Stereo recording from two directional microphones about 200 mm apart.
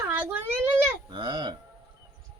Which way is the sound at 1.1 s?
20° right (ahead or behind).